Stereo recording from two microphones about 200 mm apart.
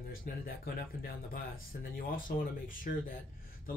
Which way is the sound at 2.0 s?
45° left (ahead or behind).